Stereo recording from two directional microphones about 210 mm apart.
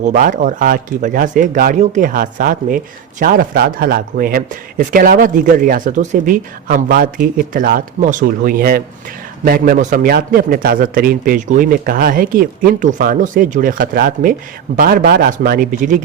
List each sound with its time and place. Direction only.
0.0 s a man's voice: 40° right (ahead or behind)